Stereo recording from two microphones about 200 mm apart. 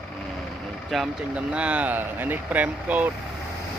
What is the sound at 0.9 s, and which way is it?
Speech, 5° right (ahead or behind).